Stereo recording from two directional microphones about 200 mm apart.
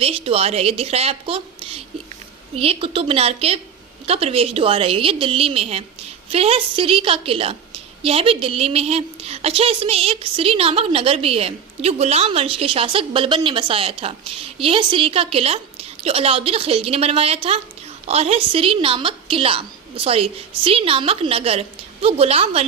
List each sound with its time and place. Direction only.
0.0 s a woman's voice: 30° right (ahead or behind)